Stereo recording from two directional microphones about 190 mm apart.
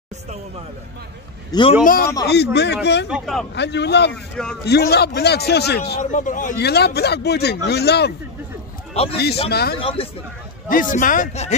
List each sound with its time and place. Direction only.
1.5 s a man's voice: 25° left (ahead or behind)
2.2 s speech: 60° left (ahead or behind)
3.1 s a man's voice: centre (ahead or behind)
3.5 s speech: 65° left (ahead or behind)
4.1 s a man's voice: 5° left (ahead or behind)
4.6 s speech: 60° left (ahead or behind)
6.1 s a man's voice: 40° left (ahead or behind)
6.6 s speech: 60° left (ahead or behind)
9.1 s speech: 55° left (ahead or behind)
9.8 s a man's voice: 30° left (ahead or behind)
10.7 s speech: 45° left (ahead or behind)